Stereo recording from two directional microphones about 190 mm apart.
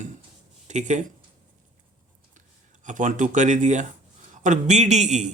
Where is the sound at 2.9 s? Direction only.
40° right (ahead or behind).